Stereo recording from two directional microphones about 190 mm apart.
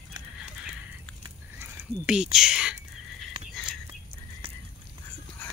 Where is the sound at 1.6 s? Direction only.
5° right (ahead or behind).